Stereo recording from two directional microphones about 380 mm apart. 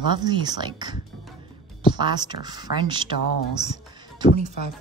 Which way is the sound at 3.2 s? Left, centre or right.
Left.